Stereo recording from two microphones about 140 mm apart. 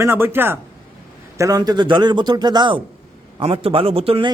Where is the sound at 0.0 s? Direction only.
20° right (ahead or behind).